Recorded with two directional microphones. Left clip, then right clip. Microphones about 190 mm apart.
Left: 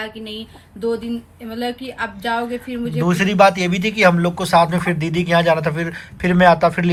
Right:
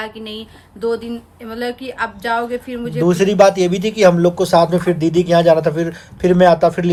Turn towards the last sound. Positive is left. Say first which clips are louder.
# right 2 dB
turn(degrees=-20)  # may be behind; listen again after turning